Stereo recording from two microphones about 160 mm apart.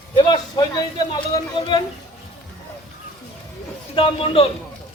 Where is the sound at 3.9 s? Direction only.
40° left (ahead or behind).